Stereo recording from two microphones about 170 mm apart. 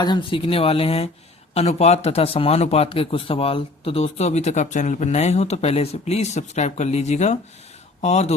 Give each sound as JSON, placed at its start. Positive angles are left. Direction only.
{"t": 0.0, "sound": "speech", "side_deg": 25}